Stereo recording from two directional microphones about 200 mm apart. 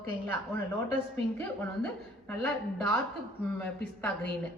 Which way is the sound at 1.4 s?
5° left (ahead or behind).